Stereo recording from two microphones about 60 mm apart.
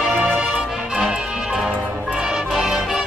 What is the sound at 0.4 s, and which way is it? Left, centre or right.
Music, centre.